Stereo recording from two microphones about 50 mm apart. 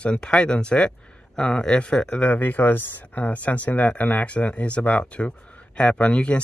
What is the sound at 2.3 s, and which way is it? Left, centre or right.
Speech, left.